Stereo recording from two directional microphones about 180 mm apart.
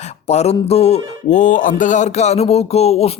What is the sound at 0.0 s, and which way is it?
Mantra, 35° left (ahead or behind).